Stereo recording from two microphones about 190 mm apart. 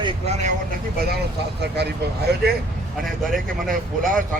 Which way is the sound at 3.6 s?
45° right (ahead or behind).